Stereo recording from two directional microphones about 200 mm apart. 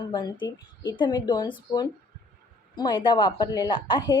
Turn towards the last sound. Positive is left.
turn(degrees=25)  # may be behind; listen again after turning